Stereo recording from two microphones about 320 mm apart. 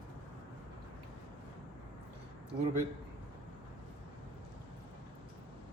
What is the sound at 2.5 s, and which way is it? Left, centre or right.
Speech, right.